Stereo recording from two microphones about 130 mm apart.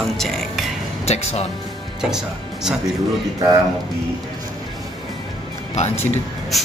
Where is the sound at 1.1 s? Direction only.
55° left (ahead or behind).